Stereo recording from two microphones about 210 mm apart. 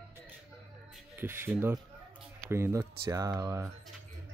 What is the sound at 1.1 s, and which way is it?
Speech, 10° right (ahead or behind).